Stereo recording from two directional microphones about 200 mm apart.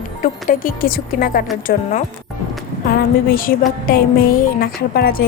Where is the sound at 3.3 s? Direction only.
45° left (ahead or behind).